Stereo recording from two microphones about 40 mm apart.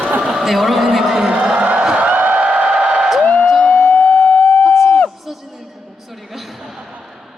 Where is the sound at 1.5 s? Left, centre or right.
Right.